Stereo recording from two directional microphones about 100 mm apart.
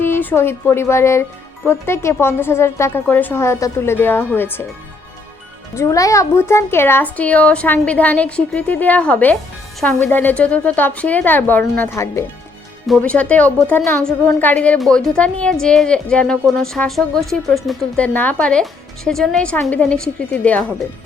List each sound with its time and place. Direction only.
0.0 s a woman's voice: 20° left (ahead or behind)
5.7 s a woman's voice: 30° left (ahead or behind)
13.0 s speech: 15° left (ahead or behind)
18.0 s speech: 15° left (ahead or behind)